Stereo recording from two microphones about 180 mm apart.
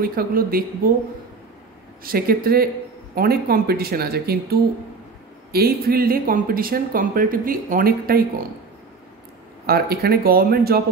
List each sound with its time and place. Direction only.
0.0 s speech: 55° right (ahead or behind)
2.0 s speech: 55° right (ahead or behind)
9.7 s speech: 60° right (ahead or behind)